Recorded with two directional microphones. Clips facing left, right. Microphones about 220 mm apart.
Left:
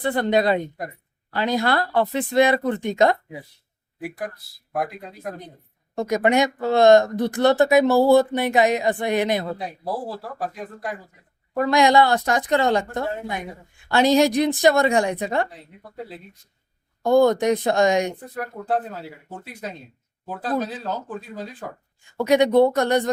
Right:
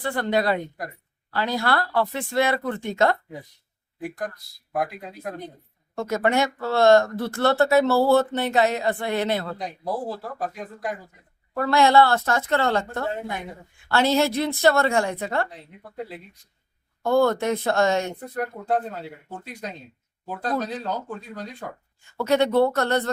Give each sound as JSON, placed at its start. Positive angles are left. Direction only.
{"t": 0.0, "sound": "speech", "side_deg": 20}
{"t": 4.7, "sound": "speech", "side_deg": 0}
{"t": 5.9, "sound": "speech", "side_deg": 15}
{"t": 9.6, "sound": "speech", "side_deg": 5}
{"t": 11.5, "sound": "speech", "side_deg": 15}
{"t": 15.4, "sound": "speech", "side_deg": 0}
{"t": 17.0, "sound": "speech", "side_deg": 15}
{"t": 18.2, "sound": "speech", "side_deg": 0}
{"t": 22.2, "sound": "speech", "side_deg": 15}